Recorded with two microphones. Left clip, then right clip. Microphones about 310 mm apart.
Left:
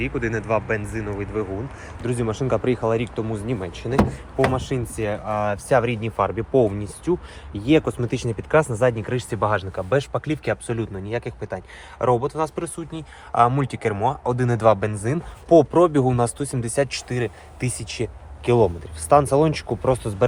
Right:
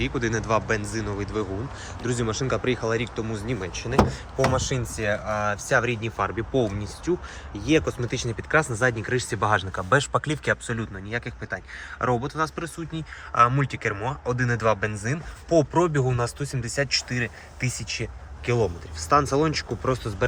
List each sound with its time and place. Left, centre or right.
0.1 s speech: centre